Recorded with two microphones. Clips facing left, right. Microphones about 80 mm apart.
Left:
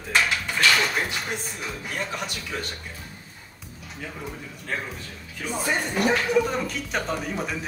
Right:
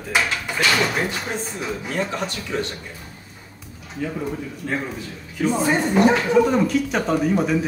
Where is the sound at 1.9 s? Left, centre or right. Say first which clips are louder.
Right 6 dB; centre.